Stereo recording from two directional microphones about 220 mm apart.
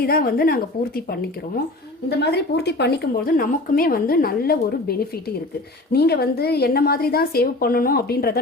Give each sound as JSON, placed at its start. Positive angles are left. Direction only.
{"t": 0.0, "sound": "a woman's voice", "side_deg": 45}
{"t": 2.0, "sound": "a woman's voice", "side_deg": 50}